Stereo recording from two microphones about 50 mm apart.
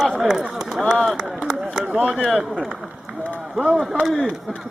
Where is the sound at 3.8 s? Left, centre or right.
Centre.